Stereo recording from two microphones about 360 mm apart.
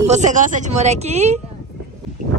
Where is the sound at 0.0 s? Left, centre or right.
Centre.